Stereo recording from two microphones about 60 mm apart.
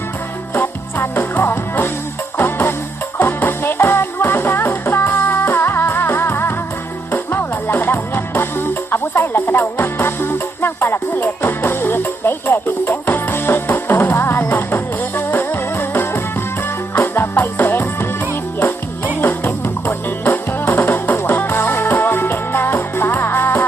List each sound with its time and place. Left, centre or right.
0.5 s music: left
19.2 s music: left